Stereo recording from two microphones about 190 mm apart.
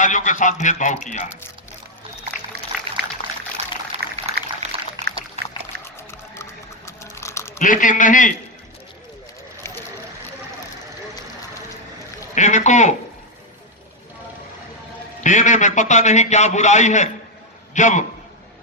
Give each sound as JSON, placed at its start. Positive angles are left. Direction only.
{"t": 0.0, "sound": "a man's voice", "side_deg": 40}
{"t": 2.7, "sound": "pour", "side_deg": -5}
{"t": 3.9, "sound": "a sound", "side_deg": -35}
{"t": 4.6, "sound": "pour", "side_deg": -35}
{"t": 5.8, "sound": "music", "side_deg": 15}
{"t": 7.6, "sound": "speech", "side_deg": 45}
{"t": 12.3, "sound": "speech", "side_deg": 40}
{"t": 15.2, "sound": "a man's voice", "side_deg": 40}